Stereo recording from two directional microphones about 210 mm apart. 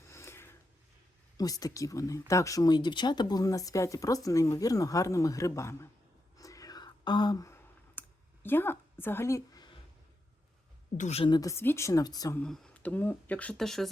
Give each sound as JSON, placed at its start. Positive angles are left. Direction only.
{"t": 0.1, "sound": "a sound", "side_deg": 10}
{"t": 1.4, "sound": "speech", "side_deg": 15}
{"t": 6.4, "sound": "whispering", "side_deg": 15}
{"t": 8.4, "sound": "a woman's voice", "side_deg": 10}
{"t": 10.9, "sound": "speech", "side_deg": 30}
{"t": 12.4, "sound": "speech", "side_deg": 5}